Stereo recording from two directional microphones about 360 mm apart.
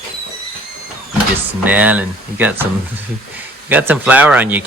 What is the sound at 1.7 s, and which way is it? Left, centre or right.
Cutlery, centre.